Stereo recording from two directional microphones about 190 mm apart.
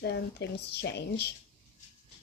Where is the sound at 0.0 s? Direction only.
60° left (ahead or behind).